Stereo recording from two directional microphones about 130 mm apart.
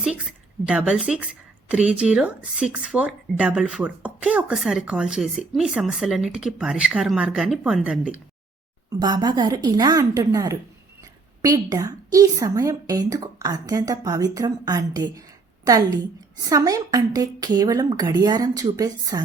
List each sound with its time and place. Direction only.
0.0 s a woman's voice: 5° right (ahead or behind)
8.9 s a woman's voice: 30° right (ahead or behind)
16.4 s a woman's voice: 25° right (ahead or behind)